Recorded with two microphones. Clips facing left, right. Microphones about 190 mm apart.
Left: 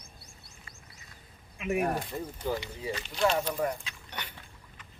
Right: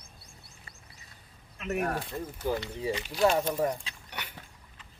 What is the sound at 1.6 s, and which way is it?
Speech, 10° left (ahead or behind).